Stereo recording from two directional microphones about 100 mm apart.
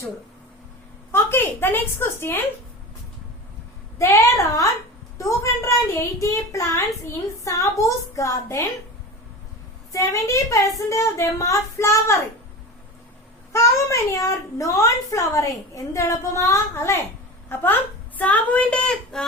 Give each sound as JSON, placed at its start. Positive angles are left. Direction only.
{"t": 1.1, "sound": "a child's voice", "side_deg": 20}
{"t": 3.9, "sound": "a child's voice", "side_deg": 30}
{"t": 9.9, "sound": "a child's voice", "side_deg": 35}
{"t": 13.5, "sound": "a child's voice", "side_deg": 30}